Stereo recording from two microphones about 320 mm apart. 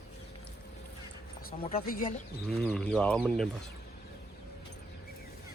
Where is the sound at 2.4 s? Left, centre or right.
Centre.